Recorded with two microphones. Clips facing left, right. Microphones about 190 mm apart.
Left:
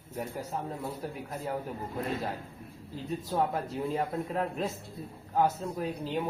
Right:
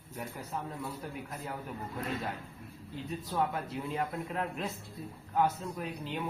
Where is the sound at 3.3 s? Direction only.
35° left (ahead or behind).